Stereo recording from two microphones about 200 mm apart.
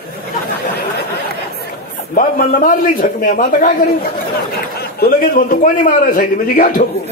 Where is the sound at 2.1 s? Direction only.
45° left (ahead or behind).